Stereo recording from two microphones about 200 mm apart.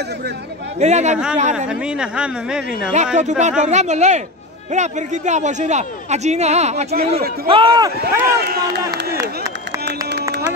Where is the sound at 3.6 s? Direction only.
35° right (ahead or behind).